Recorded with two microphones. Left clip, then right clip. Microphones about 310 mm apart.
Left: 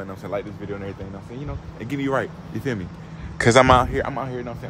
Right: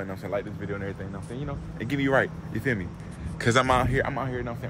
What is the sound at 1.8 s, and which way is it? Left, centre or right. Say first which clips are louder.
Speech: even; centre.